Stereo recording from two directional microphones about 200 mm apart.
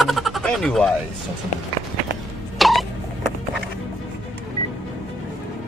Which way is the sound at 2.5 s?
Centre (ahead or behind).